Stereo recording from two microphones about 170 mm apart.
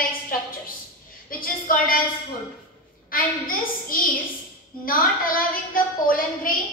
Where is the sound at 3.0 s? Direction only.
55° left (ahead or behind).